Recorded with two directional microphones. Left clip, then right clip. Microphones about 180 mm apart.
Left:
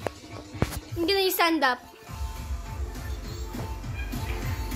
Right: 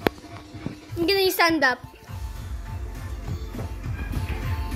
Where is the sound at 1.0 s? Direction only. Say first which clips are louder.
Right 3 dB; 20° right (ahead or behind).